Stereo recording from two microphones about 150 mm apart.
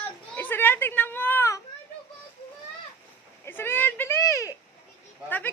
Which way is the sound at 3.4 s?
15° left (ahead or behind).